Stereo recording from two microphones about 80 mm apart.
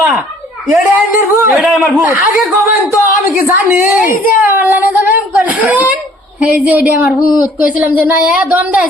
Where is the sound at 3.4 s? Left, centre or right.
Right.